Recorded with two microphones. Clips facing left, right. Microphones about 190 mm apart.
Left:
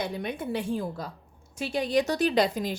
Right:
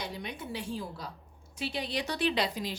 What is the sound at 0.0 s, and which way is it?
A woman's voice, 55° left (ahead or behind).